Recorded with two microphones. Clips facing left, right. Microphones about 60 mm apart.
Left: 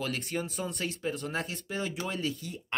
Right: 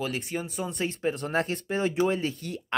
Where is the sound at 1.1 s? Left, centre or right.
Right.